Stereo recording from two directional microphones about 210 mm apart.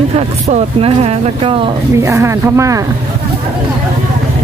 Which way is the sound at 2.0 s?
15° right (ahead or behind).